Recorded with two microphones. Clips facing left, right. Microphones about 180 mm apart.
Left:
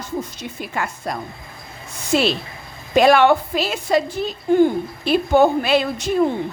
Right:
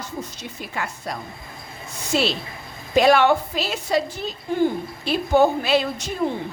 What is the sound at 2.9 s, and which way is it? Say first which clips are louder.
A woman's voice: left 3 dB; 55° left (ahead or behind).